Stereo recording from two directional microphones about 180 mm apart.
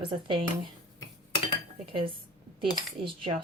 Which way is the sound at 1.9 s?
30° right (ahead or behind).